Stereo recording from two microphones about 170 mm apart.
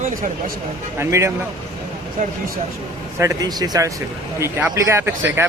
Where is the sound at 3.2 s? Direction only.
20° right (ahead or behind).